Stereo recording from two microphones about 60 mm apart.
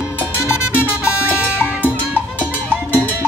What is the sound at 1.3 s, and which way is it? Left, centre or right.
Music, left.